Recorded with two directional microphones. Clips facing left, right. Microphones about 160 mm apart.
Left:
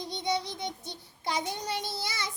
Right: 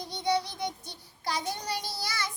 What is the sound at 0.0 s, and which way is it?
Child singing, 20° left (ahead or behind).